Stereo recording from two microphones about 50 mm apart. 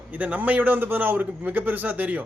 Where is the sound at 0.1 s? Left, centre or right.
Right.